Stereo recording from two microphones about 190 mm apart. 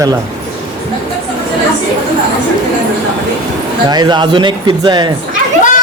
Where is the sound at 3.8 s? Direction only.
20° right (ahead or behind).